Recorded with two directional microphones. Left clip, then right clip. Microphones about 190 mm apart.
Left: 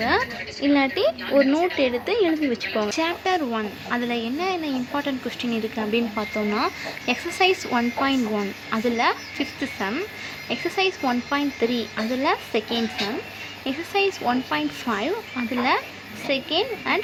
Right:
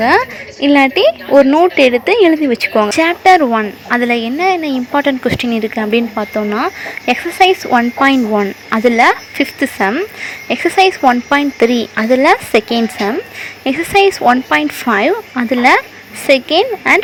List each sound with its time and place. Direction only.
0.0 s speech: 35° right (ahead or behind)